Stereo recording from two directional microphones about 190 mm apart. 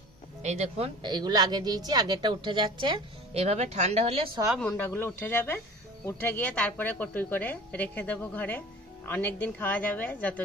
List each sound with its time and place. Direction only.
0.4 s a woman's voice: 35° right (ahead or behind)
4.6 s a woman's voice: 10° left (ahead or behind)